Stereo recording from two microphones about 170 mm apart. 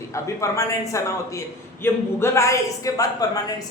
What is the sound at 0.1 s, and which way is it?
A man's voice, 20° left (ahead or behind).